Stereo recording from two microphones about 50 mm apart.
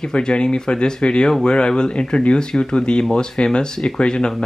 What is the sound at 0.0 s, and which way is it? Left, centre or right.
Speech, centre.